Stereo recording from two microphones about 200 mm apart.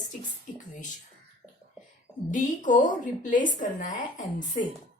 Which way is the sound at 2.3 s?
40° left (ahead or behind).